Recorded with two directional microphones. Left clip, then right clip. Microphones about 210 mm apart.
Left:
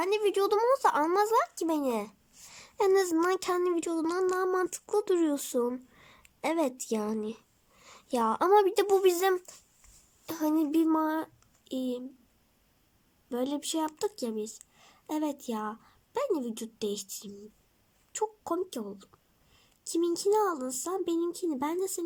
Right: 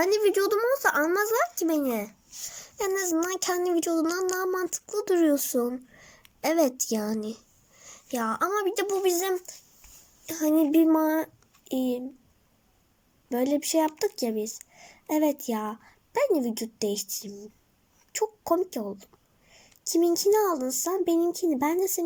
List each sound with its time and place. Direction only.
0.0 s speech: 20° left (ahead or behind)
13.3 s speech: 15° left (ahead or behind)